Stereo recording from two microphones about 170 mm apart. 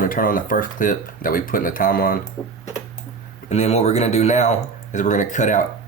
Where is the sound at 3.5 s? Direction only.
40° left (ahead or behind).